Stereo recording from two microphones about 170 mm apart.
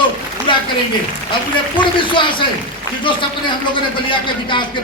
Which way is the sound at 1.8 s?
30° left (ahead or behind).